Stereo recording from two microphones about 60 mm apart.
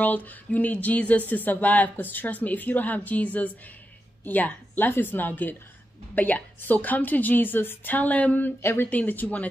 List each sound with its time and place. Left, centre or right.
0.0 s a woman's voice: left